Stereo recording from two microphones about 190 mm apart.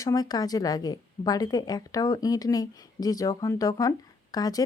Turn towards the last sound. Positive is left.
turn(degrees=20)  # may be behind; listen again after turning